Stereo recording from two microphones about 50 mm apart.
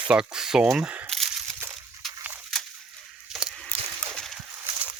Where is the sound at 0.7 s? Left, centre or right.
Right.